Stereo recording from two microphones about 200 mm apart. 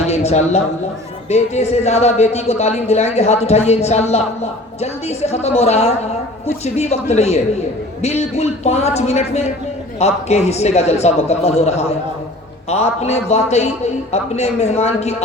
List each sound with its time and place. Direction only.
0.1 s speech: 35° left (ahead or behind)